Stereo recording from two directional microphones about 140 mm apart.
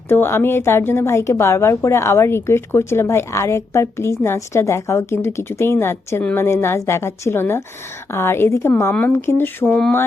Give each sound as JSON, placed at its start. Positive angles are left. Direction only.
{"t": 0.1, "sound": "a woman's voice", "side_deg": 15}